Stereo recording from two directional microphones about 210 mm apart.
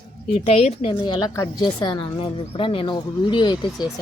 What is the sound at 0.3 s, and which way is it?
A woman's voice, 30° left (ahead or behind).